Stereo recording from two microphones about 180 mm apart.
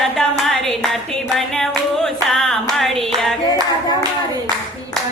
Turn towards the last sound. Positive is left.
turn(degrees=0)  # may be behind; listen again after turning